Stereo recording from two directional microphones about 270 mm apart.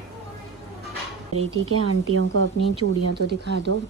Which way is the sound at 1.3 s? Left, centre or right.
Right.